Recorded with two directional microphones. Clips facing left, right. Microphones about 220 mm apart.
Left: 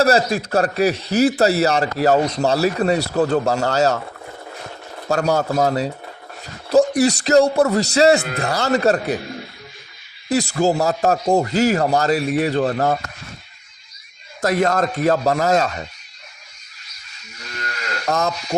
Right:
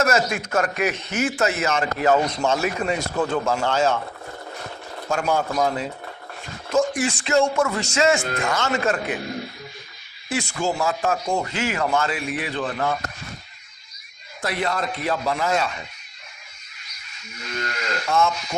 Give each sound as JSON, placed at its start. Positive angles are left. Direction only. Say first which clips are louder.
{"t": 0.0, "sound": "a man's voice", "louder": "left 5 dB", "side_deg": 35}
{"t": 5.0, "sound": "a man's voice", "louder": "left 4 dB", "side_deg": 40}
{"t": 10.2, "sound": "a man's voice", "louder": "left 7 dB", "side_deg": 40}
{"t": 14.4, "sound": "speech", "louder": "left 7 dB", "side_deg": 45}
{"t": 18.0, "sound": "speech", "louder": "left 1 dB", "side_deg": 40}